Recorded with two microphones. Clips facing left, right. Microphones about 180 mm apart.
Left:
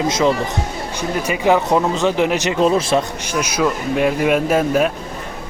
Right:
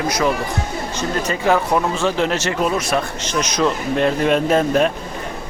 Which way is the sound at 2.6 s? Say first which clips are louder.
Left 6 dB; 30° left (ahead or behind).